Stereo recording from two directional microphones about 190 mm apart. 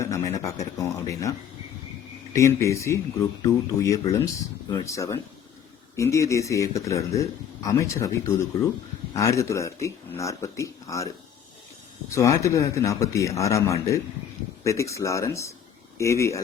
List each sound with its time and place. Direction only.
0.0 s speech: 15° left (ahead or behind)
2.3 s speech: 15° left (ahead or behind)
12.1 s speech: 15° left (ahead or behind)